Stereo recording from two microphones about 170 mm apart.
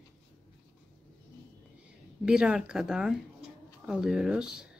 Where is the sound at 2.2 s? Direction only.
5° right (ahead or behind).